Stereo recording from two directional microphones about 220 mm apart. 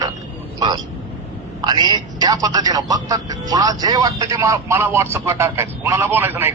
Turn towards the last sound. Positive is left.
turn(degrees=-10)  # may be behind; listen again after turning